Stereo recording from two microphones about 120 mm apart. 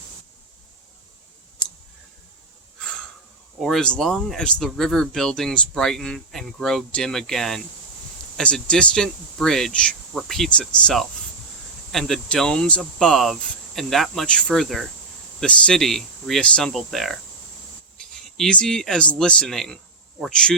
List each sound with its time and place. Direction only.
1.6 s clicking: 40° left (ahead or behind)
3.6 s speech: 5° left (ahead or behind)